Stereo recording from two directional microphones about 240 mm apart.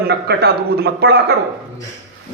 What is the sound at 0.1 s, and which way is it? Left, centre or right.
A man's voice, right.